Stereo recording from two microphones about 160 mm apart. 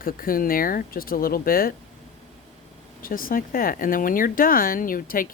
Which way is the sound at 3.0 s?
60° left (ahead or behind).